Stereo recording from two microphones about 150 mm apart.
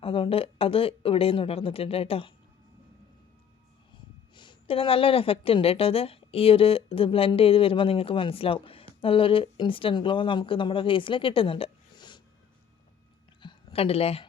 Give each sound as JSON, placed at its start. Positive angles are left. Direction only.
{"t": 0.0, "sound": "speech", "side_deg": 40}
{"t": 3.9, "sound": "speech", "side_deg": 30}
{"t": 13.4, "sound": "a sound", "side_deg": 30}